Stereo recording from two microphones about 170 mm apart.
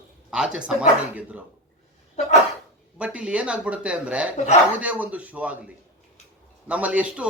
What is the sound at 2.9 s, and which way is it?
Speech, 5° right (ahead or behind).